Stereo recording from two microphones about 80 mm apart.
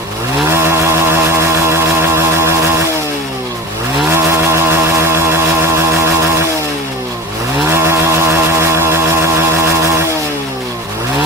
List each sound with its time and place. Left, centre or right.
0.5 s vehicle: right
4.1 s vehicle: right
7.7 s vehicle: right